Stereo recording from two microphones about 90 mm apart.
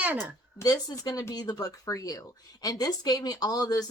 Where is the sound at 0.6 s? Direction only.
40° left (ahead or behind).